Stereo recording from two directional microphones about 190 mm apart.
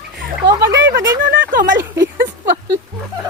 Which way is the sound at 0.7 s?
70° right (ahead or behind).